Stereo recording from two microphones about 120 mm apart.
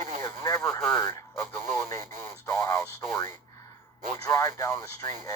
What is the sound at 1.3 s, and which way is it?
Speech, 20° left (ahead or behind).